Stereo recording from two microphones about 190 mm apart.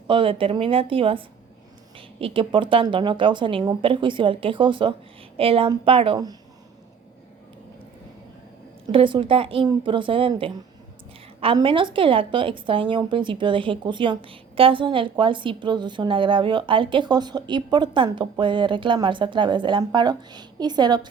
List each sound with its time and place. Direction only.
0.1 s a woman's voice: 25° right (ahead or behind)
8.9 s a woman's voice: 25° right (ahead or behind)